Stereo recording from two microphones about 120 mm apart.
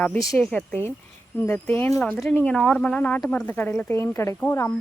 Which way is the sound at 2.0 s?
Centre (ahead or behind).